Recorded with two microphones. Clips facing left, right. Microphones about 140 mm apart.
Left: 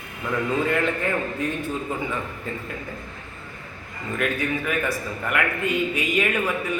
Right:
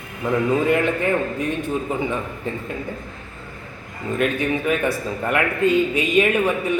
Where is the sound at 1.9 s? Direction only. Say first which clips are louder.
Right 5 dB; 20° right (ahead or behind).